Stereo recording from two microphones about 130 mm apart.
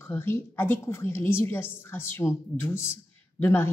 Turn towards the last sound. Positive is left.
turn(degrees=20)  # may be behind; listen again after turning